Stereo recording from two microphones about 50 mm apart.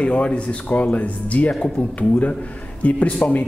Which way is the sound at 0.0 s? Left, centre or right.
Left.